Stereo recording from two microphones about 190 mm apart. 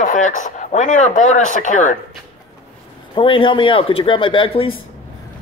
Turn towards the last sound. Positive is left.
turn(degrees=30)  # may be behind; listen again after turning